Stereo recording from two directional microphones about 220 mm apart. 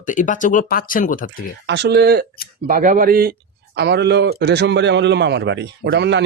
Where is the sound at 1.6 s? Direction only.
50° right (ahead or behind).